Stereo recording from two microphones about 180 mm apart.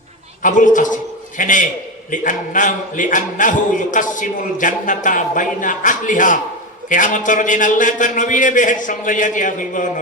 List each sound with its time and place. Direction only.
0.4 s a man's voice: 45° left (ahead or behind)